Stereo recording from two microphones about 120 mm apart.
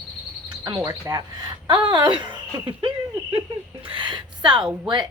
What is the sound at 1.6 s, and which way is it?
Speech, 40° right (ahead or behind).